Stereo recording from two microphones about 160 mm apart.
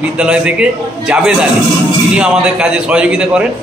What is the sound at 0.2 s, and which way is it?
A man's voice, 5° right (ahead or behind).